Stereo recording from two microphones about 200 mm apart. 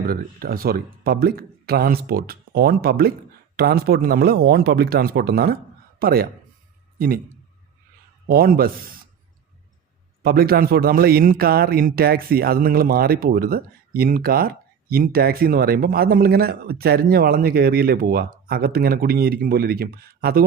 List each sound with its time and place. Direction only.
0.1 s a man's voice: 50° right (ahead or behind)
8.3 s a man's voice: 50° right (ahead or behind)
10.2 s a man's voice: 50° right (ahead or behind)